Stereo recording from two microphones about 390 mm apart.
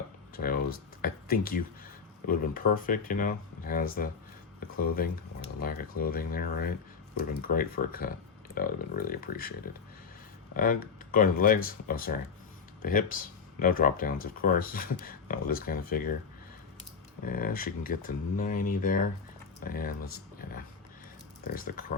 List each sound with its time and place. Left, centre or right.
0.3 s a sound: left
2.2 s speech: left
5.5 s speech: left
10.6 s speech: left
17.2 s speech: left